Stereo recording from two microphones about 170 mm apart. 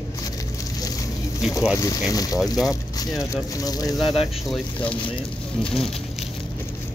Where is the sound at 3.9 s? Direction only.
Centre (ahead or behind).